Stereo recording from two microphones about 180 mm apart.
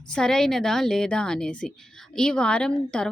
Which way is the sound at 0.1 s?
5° left (ahead or behind).